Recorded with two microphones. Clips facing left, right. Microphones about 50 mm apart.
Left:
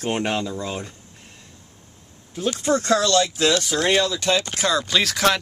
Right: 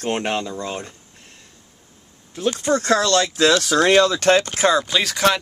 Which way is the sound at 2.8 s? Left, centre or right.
Right.